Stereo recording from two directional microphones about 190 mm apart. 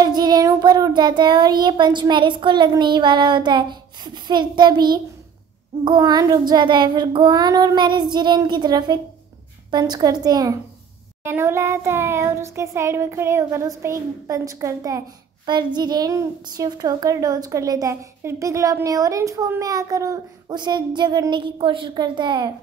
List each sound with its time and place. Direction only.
0.0 s child singing: 20° right (ahead or behind)